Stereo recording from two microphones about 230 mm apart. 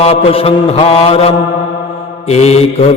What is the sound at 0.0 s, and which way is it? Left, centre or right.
Mantra, left.